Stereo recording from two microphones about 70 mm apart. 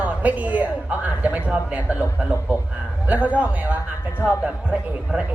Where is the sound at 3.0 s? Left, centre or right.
Right.